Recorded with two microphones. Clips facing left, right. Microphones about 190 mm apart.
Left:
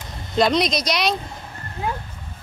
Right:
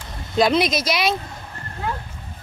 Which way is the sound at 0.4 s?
5° right (ahead or behind).